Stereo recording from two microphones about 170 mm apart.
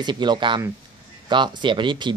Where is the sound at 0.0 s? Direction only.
25° right (ahead or behind).